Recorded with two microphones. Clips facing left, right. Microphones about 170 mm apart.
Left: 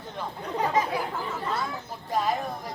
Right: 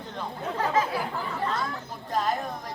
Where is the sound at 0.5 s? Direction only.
15° left (ahead or behind).